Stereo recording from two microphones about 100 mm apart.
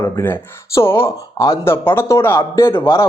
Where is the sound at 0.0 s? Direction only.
30° left (ahead or behind).